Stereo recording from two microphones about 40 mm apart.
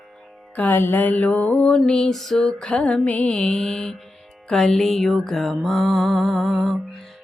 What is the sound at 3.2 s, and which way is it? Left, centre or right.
Music, centre.